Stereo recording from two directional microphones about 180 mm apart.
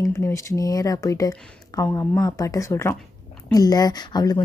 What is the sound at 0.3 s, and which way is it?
Speech, 15° left (ahead or behind).